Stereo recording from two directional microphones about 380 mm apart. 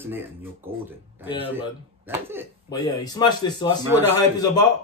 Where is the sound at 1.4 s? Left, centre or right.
Centre.